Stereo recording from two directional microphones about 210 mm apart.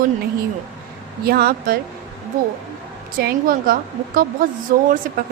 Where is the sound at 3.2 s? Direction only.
45° right (ahead or behind).